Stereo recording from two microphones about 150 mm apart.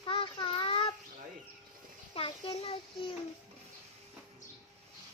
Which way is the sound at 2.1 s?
35° left (ahead or behind).